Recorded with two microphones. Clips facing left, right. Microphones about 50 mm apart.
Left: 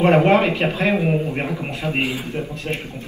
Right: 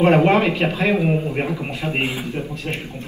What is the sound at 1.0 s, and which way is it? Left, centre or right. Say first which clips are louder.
Speech: even; centre.